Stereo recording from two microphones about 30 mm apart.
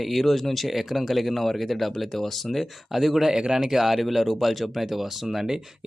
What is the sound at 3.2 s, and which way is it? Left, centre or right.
Speech, right.